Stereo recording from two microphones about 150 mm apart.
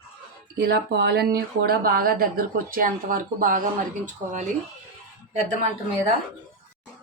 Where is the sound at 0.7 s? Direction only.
90° right; by 4.4 s 55° right (ahead or behind).